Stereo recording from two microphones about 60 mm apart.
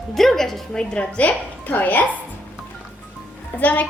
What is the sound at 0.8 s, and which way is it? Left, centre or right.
A woman's voice, centre.